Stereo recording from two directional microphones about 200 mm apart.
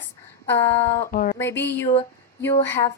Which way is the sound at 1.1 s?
45° left (ahead or behind).